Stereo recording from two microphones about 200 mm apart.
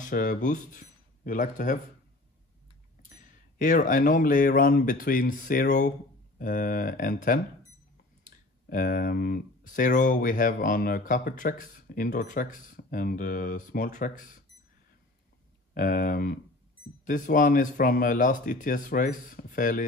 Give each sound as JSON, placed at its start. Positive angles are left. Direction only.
{"t": 0.0, "sound": "speech", "side_deg": 40}
{"t": 3.0, "sound": "speech", "side_deg": 40}
{"t": 15.7, "sound": "speech", "side_deg": 45}